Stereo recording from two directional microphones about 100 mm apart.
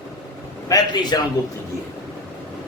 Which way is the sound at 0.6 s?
40° left (ahead or behind).